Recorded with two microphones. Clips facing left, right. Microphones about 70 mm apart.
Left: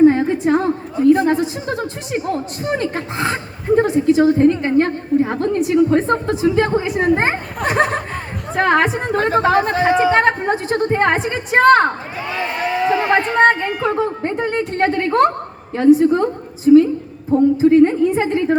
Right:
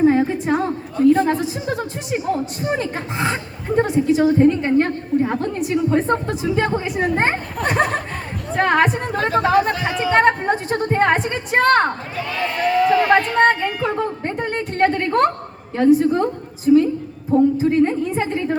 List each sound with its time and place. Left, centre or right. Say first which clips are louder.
0.0 s a sound: left 4 dB; centre
0.9 s a woman's voice: left 1 dB; centre
1.4 s a woman's voice: left 2 dB; centre
9.3 s speech: even; left
10.2 s a woman's voice: even; centre
12.3 s speech: right 1 dB; centre
13.4 s a woman's voice: left 2 dB; centre